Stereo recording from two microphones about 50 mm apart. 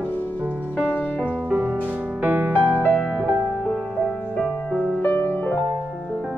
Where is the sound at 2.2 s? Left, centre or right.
Right.